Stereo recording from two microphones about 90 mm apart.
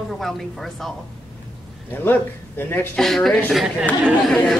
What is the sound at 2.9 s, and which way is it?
Speech, centre (ahead or behind).